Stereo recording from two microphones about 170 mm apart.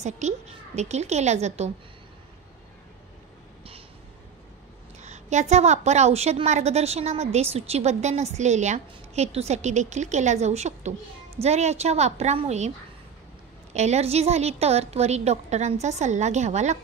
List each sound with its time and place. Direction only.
0.2 s a woman's voice: 45° right (ahead or behind)
5.0 s a woman's voice: 40° right (ahead or behind)
13.7 s a woman's voice: 40° right (ahead or behind)